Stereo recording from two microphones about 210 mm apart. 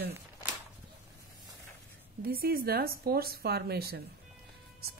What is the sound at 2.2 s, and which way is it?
Speech, 45° right (ahead or behind).